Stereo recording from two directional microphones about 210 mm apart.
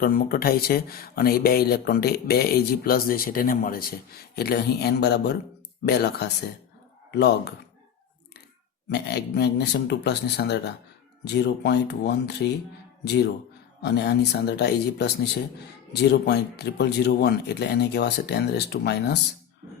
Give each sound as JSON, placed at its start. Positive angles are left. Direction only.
{"t": 0.0, "sound": "speech", "side_deg": 45}
{"t": 8.9, "sound": "speech", "side_deg": 50}
{"t": 13.8, "sound": "speech", "side_deg": 50}